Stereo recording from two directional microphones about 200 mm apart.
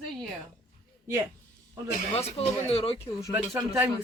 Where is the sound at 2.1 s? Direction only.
30° left (ahead or behind).